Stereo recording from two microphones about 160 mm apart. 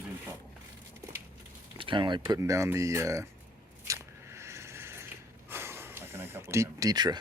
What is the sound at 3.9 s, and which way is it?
Biting, 15° right (ahead or behind).